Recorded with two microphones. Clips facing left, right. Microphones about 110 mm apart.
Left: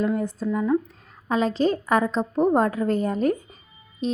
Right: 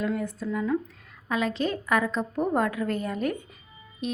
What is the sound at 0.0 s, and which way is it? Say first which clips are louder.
A woman's voice: left 5 dB; 30° left (ahead or behind).